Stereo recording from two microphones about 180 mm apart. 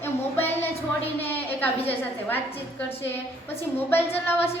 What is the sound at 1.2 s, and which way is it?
Speech, 10° left (ahead or behind).